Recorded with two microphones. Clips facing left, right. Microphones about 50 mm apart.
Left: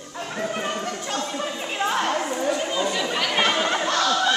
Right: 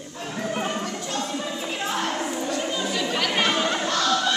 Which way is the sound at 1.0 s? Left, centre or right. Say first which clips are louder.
Left 1 dB; centre.